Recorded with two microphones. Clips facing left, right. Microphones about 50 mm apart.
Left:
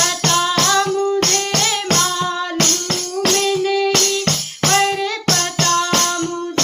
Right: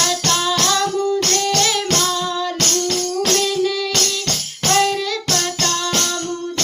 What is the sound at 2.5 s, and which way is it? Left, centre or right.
Music, left.